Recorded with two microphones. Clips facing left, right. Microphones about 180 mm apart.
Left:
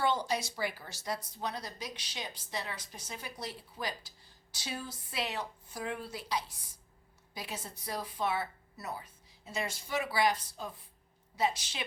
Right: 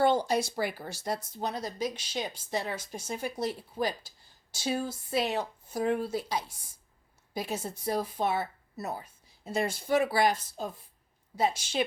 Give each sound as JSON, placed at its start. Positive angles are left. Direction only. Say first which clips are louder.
{"t": 0.3, "sound": "speech", "louder": "right 5 dB", "side_deg": -55}
{"t": 11.3, "sound": "speech", "louder": "right 4 dB", "side_deg": -50}